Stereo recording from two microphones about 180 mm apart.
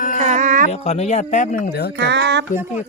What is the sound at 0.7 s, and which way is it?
Speech, 35° left (ahead or behind).